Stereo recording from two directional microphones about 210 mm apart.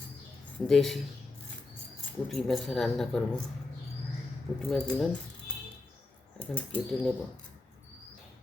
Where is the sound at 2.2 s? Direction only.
Centre (ahead or behind).